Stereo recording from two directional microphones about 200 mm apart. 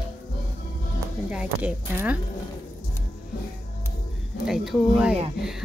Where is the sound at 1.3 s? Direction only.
5° right (ahead or behind).